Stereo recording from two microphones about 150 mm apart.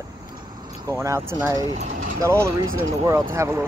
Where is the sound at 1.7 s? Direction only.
50° right (ahead or behind).